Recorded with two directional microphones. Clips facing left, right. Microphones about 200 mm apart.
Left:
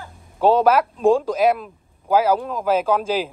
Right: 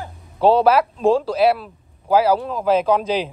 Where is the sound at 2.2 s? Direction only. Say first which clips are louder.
Right 2 dB; 10° left (ahead or behind).